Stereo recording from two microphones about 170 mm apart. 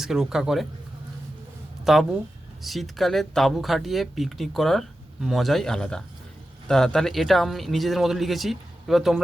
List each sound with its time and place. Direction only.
0.0 s speech: 5° right (ahead or behind)
1.8 s speech: centre (ahead or behind)